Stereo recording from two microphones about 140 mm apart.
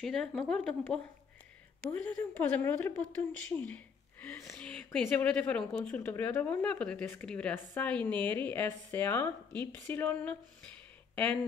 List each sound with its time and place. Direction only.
0.0 s a woman's voice: 5° left (ahead or behind)